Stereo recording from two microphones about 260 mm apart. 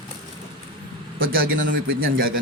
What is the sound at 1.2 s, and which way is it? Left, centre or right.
Speech, right.